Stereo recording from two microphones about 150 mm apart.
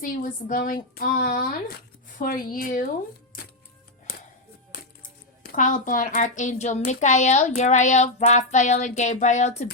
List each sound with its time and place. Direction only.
0.0 s a woman's voice: 65° left (ahead or behind)
4.7 s speech: 75° left (ahead or behind); by 9.6 s 50° left (ahead or behind)